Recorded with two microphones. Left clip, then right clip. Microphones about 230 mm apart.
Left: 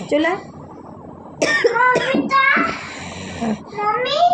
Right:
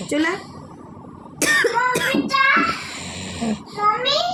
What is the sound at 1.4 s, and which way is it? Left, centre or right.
Speech, right.